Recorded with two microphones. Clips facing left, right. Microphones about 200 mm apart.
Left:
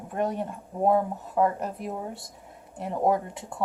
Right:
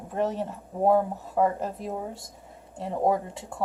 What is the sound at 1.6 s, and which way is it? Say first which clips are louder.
Speech: even; 25° right (ahead or behind).